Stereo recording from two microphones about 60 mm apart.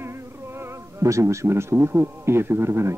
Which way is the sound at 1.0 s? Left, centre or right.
Right.